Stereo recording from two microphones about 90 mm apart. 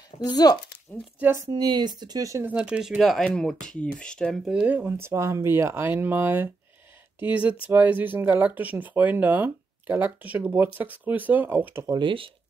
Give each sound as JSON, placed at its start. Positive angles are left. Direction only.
{"t": 0.3, "sound": "speech", "side_deg": 45}
{"t": 0.9, "sound": "speech", "side_deg": 20}
{"t": 1.4, "sound": "speech", "side_deg": -50}
{"t": 2.4, "sound": "speech", "side_deg": -15}
{"t": 3.0, "sound": "speech", "side_deg": 5}
{"t": 4.6, "sound": "speech", "side_deg": -20}
{"t": 11.8, "sound": "speech", "side_deg": -60}